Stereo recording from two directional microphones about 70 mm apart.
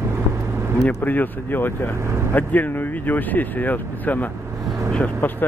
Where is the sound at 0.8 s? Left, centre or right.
Left.